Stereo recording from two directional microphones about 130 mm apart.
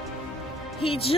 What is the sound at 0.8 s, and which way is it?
Speech, 45° left (ahead or behind).